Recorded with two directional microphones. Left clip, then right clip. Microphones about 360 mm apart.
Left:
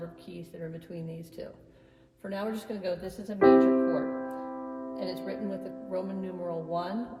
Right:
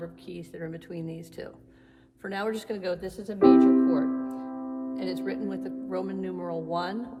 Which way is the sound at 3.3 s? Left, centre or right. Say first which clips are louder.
Right 1 dB; left.